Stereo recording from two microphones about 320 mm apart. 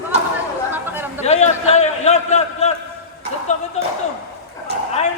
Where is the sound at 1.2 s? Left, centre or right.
Centre.